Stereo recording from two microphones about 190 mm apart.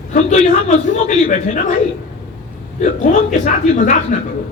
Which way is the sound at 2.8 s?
40° left (ahead or behind).